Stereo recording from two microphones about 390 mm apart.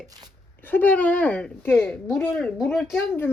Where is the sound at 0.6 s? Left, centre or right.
Centre.